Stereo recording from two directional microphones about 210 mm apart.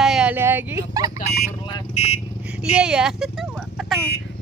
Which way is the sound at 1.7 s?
30° left (ahead or behind).